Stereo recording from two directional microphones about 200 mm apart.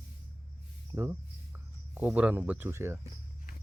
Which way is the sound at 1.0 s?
10° right (ahead or behind).